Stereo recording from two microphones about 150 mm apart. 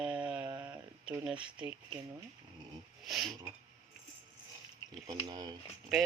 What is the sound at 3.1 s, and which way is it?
Speech, centre (ahead or behind).